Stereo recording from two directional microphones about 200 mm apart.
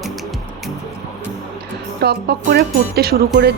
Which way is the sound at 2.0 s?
55° right (ahead or behind).